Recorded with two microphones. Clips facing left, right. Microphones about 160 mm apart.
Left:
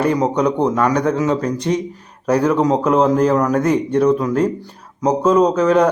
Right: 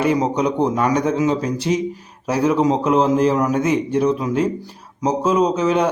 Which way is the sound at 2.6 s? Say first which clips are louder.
Left 1 dB; 40° left (ahead or behind).